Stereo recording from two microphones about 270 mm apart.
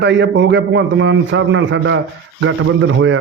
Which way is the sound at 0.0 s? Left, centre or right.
Right.